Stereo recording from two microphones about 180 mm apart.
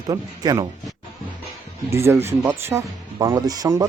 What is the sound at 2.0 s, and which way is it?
Speech, 15° right (ahead or behind).